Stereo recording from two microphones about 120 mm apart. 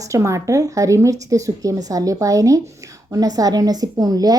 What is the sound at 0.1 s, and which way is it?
A woman's voice, 25° right (ahead or behind).